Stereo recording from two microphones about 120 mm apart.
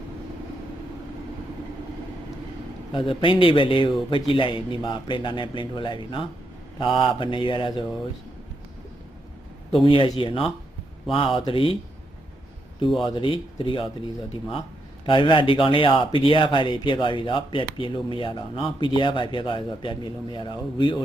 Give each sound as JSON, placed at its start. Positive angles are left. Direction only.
{"t": 2.9, "sound": "speech", "side_deg": 45}
{"t": 9.8, "sound": "speech", "side_deg": 45}
{"t": 13.1, "sound": "speech", "side_deg": 45}
{"t": 15.0, "sound": "speech", "side_deg": 45}